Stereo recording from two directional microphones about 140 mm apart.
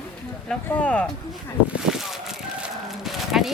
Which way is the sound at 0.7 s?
10° left (ahead or behind).